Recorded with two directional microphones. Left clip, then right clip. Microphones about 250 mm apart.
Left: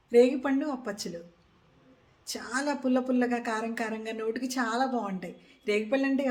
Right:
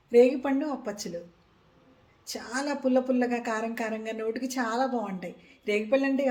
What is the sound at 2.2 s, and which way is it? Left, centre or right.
A woman's voice, centre.